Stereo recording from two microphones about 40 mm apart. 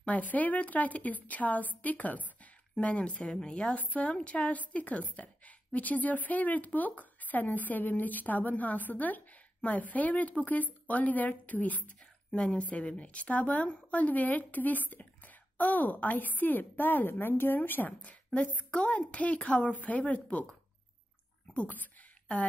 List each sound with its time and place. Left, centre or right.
0.0 s a woman's voice: left
3.3 s a woman's voice: centre
3.7 s a woman's voice: left
12.3 s a woman's voice: left
18.0 s speech: left
21.5 s a woman's voice: left